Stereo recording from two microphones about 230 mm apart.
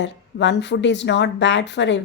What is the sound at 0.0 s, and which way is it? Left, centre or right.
Speech, left.